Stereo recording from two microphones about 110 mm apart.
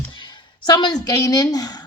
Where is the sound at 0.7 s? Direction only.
40° left (ahead or behind).